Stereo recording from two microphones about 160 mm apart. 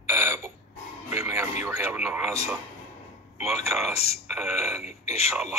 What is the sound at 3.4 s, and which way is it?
A man's voice, centre (ahead or behind).